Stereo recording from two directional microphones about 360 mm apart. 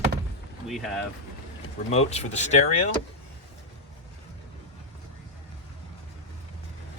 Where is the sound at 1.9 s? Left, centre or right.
Centre.